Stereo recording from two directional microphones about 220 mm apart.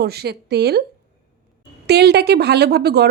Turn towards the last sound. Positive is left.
turn(degrees=-45)  # may be behind; listen again after turning